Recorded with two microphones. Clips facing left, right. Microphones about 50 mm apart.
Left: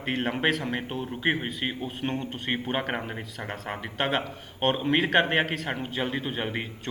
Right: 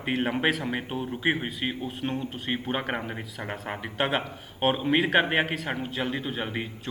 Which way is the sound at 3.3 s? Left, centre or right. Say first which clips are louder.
Even; centre.